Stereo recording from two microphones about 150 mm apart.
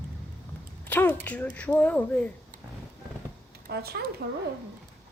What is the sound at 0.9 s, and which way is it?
Speech, 10° left (ahead or behind).